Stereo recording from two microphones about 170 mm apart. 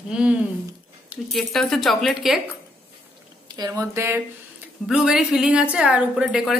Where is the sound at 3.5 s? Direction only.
20° right (ahead or behind).